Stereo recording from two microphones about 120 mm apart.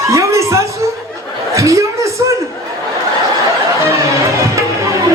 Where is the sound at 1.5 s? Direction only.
25° right (ahead or behind).